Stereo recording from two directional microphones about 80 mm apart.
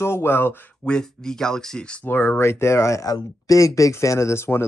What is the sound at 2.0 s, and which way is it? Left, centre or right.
Speech, left.